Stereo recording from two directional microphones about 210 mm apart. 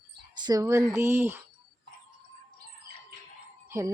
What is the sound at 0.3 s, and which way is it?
A woman's voice, 20° right (ahead or behind).